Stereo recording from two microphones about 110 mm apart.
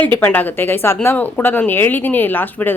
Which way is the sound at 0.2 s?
15° left (ahead or behind).